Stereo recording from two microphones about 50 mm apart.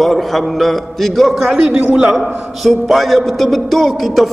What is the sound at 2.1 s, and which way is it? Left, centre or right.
Mantra, centre.